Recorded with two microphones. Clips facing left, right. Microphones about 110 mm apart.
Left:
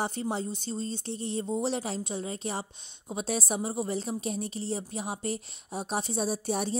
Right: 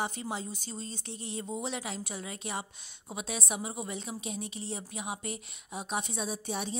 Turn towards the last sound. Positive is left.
turn(degrees=40)  # may be behind; listen again after turning